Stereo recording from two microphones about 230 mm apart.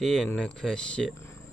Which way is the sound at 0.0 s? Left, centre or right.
Centre.